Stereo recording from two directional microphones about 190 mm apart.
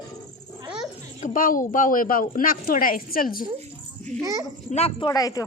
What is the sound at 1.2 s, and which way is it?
Speech, 45° left (ahead or behind).